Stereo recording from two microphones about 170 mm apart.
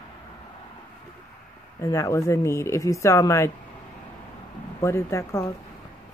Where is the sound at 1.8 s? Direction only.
20° left (ahead or behind).